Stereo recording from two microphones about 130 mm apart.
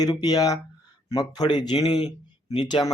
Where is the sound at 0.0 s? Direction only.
30° left (ahead or behind).